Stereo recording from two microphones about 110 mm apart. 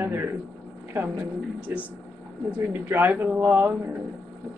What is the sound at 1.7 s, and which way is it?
Speech, 20° right (ahead or behind).